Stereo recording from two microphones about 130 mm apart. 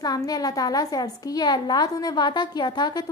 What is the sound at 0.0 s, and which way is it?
A woman's voice, 30° left (ahead or behind).